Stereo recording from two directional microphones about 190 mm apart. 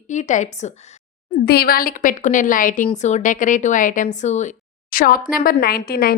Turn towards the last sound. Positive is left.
turn(degrees=55)  # may be behind; listen again after turning